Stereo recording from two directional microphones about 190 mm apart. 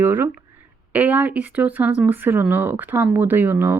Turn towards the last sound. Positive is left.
turn(degrees=-10)  # may be behind; listen again after turning